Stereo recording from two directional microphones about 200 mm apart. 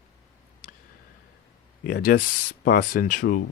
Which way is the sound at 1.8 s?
45° left (ahead or behind).